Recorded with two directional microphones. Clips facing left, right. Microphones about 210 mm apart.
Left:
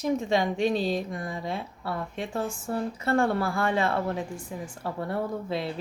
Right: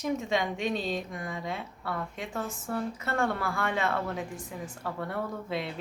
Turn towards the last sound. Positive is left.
turn(degrees=35)  # may be behind; listen again after turning